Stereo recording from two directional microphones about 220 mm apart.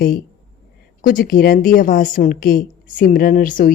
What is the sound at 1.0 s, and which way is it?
Speech, 40° left (ahead or behind).